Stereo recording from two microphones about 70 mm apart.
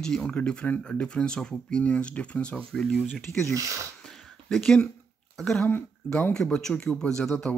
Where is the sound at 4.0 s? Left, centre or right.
Centre.